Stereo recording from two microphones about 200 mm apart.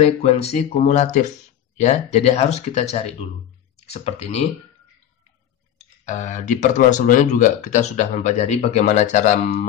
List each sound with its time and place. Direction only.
0.0 s speech: 30° left (ahead or behind)
5.8 s speech: 35° left (ahead or behind)